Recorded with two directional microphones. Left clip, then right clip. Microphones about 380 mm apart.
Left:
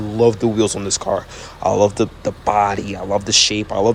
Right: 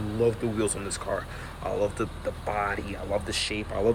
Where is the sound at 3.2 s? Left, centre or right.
Centre.